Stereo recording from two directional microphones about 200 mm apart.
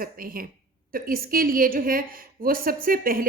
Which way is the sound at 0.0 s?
45° right (ahead or behind).